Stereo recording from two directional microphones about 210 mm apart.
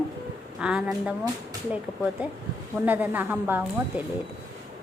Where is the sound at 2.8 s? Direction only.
10° right (ahead or behind).